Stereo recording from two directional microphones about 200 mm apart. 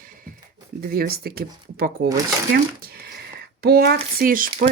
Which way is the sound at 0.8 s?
50° right (ahead or behind).